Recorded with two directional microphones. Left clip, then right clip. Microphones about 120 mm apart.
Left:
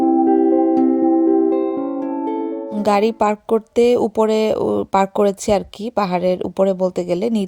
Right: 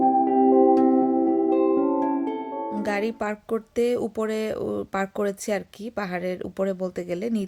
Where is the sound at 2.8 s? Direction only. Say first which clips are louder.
Left 13 dB; 50° left (ahead or behind).